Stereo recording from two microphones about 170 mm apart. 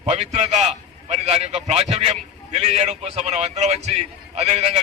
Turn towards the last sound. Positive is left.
turn(degrees=-40)  # may be behind; listen again after turning